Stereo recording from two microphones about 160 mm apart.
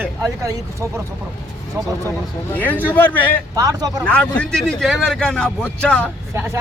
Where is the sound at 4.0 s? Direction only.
10° left (ahead or behind).